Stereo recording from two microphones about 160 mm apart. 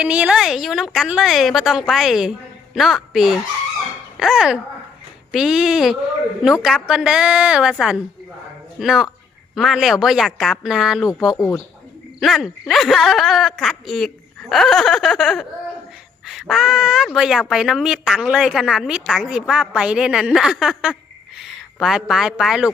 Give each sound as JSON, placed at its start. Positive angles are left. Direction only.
{"t": 0.0, "sound": "a woman's voice", "side_deg": -5}
{"t": 11.3, "sound": "speech", "side_deg": 20}
{"t": 12.2, "sound": "a woman's voice", "side_deg": 0}